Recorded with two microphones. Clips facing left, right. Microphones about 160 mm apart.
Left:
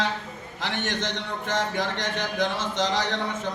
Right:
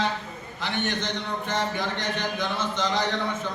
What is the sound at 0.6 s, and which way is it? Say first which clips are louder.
Speech: even; 90° left.